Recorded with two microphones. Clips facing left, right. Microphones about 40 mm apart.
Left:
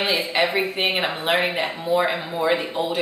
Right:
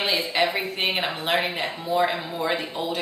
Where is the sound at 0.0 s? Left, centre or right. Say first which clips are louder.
Left 2 dB; centre.